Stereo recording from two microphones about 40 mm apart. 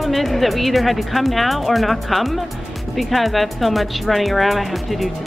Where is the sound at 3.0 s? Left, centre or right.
Centre.